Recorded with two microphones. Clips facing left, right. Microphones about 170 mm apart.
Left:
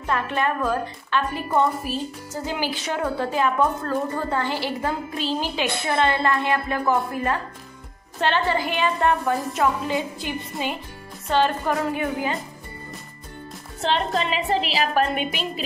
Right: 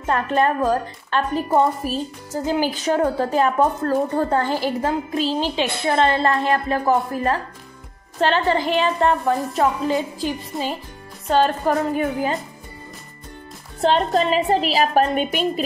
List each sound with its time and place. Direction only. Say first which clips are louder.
0.0 s a woman's voice: right 5 dB; 40° right (ahead or behind)
10.5 s speech: left 1 dB; centre (ahead or behind)
11.2 s a woman's voice: right 3 dB; 40° right (ahead or behind)
13.7 s a woman's voice: right 5 dB; 40° right (ahead or behind)